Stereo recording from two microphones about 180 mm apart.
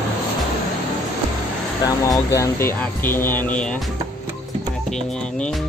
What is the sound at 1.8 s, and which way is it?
Speech, 20° left (ahead or behind).